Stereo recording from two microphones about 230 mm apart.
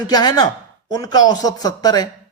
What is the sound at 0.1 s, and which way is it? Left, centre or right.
Speech, centre.